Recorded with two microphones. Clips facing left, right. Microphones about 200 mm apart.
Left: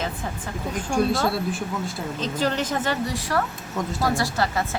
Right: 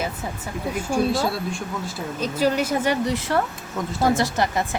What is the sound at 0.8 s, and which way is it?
A woman's voice, centre (ahead or behind).